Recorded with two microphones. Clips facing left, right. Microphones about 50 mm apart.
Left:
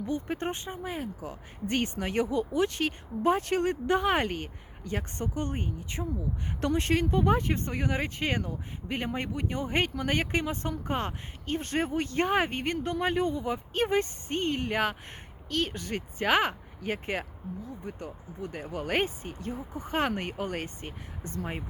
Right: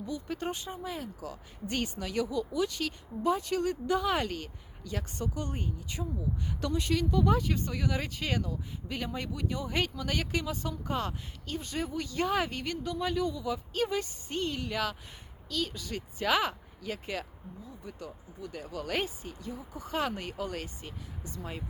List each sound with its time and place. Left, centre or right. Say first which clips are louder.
0.3 s speech: left 2 dB; left
1.6 s speech: left 4 dB; left